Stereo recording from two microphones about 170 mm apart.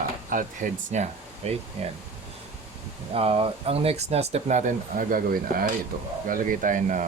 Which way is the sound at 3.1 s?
35° right (ahead or behind).